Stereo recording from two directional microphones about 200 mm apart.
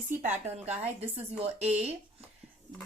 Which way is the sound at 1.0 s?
30° right (ahead or behind).